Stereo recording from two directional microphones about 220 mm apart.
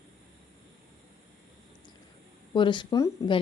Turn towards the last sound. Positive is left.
turn(degrees=20)  # may be behind; listen again after turning